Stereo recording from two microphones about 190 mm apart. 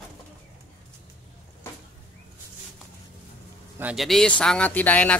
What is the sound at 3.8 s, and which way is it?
A man's voice, centre (ahead or behind).